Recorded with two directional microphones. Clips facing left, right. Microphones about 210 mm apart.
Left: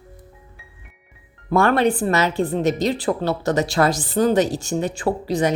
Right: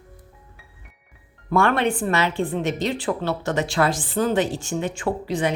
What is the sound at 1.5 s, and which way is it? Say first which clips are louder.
Speech: left 3 dB; 40° left (ahead or behind).